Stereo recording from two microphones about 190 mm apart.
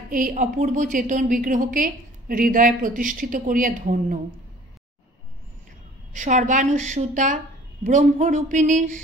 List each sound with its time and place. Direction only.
0.1 s a woman's voice: 45° right (ahead or behind)
6.1 s a woman's voice: 40° right (ahead or behind)